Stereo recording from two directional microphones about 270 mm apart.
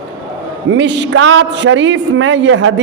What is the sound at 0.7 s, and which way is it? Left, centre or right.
A man's voice, right.